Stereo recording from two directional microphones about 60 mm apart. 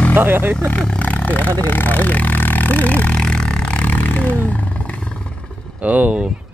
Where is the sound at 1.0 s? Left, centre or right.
Left.